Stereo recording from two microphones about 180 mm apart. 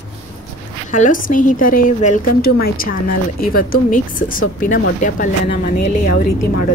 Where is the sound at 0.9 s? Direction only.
45° left (ahead or behind).